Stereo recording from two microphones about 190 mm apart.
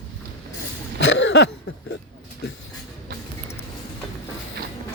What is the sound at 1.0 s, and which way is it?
Cough, 70° left (ahead or behind).